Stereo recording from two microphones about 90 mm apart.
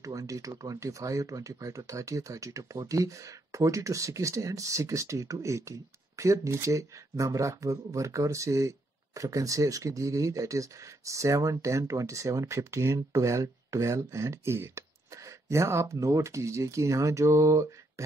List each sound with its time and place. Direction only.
0.0 s speech: 40° right (ahead or behind)